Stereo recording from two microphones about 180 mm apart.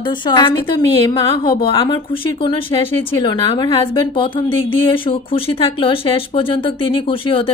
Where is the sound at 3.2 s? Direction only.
25° left (ahead or behind).